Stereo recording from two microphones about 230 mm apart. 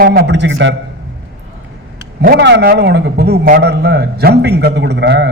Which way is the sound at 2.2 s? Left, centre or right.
Right.